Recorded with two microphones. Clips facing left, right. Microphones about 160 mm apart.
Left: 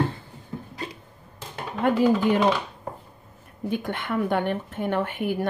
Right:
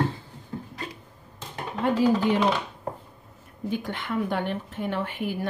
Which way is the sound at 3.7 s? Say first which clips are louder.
Left 2 dB; 55° left (ahead or behind).